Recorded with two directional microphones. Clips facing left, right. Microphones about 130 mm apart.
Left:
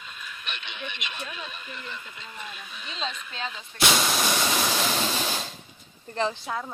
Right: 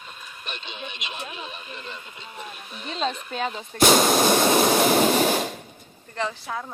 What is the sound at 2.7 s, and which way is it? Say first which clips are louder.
Speech: right 8 dB; 45° right (ahead or behind).